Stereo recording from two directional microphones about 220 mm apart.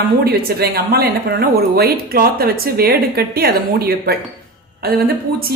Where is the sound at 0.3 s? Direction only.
45° right (ahead or behind).